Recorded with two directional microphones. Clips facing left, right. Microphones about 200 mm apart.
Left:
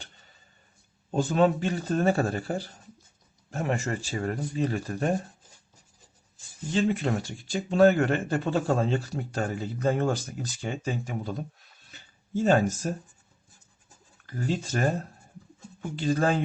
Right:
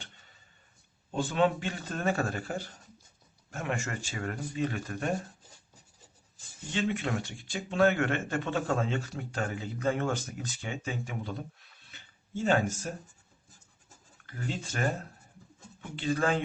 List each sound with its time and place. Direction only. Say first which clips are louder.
1.1 s speech: left 4 dB; 40° left (ahead or behind)
6.7 s speech: left 5 dB; 35° left (ahead or behind)
11.9 s a sound: left 10 dB; 40° left (ahead or behind)
14.3 s speech: left 7 dB; 40° left (ahead or behind)